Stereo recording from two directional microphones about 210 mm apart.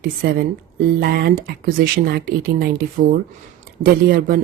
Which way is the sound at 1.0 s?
45° right (ahead or behind).